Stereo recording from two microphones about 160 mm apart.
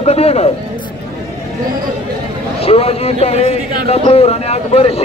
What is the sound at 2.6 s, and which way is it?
A man's voice, 40° left (ahead or behind).